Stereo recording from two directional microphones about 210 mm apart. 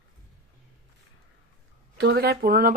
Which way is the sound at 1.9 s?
50° right (ahead or behind).